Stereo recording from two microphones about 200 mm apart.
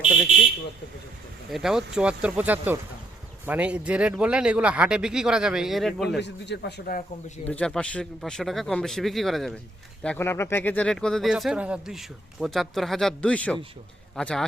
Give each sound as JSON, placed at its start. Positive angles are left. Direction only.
{"t": 0.0, "sound": "a sound", "side_deg": 0}
{"t": 1.5, "sound": "speech", "side_deg": 0}
{"t": 6.1, "sound": "speech", "side_deg": 60}
{"t": 7.4, "sound": "speech", "side_deg": 5}